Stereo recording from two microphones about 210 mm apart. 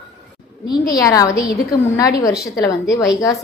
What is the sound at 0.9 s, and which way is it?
Speech, 15° left (ahead or behind).